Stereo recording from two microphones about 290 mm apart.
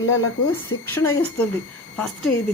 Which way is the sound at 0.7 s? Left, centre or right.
Left.